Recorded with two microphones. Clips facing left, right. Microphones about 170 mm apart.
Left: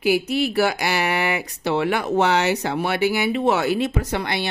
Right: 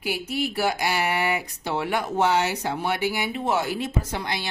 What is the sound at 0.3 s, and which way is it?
Speech, 80° left.